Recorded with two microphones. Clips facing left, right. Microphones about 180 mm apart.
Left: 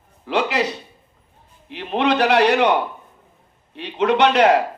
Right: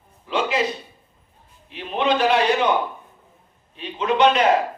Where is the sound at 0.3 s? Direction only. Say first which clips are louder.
Left 2 dB; 70° left (ahead or behind).